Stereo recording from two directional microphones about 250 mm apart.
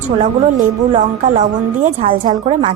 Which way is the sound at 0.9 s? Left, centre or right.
Right.